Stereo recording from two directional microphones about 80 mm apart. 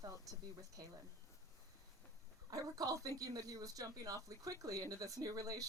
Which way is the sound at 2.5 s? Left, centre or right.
Right.